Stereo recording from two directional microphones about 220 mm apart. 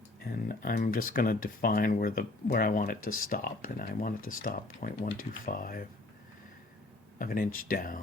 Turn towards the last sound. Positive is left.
turn(degrees=40)  # may be behind; listen again after turning